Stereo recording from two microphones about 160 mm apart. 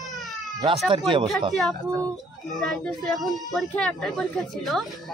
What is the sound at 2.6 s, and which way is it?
A man's voice, centre (ahead or behind).